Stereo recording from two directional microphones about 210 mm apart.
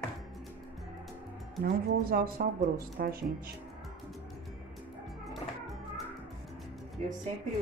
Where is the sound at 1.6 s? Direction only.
45° right (ahead or behind).